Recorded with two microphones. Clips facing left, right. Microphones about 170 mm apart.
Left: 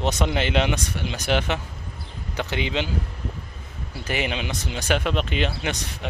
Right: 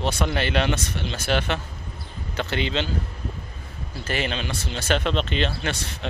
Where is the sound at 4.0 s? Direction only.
15° left (ahead or behind).